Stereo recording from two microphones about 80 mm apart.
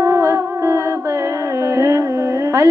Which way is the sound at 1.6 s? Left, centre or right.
Right.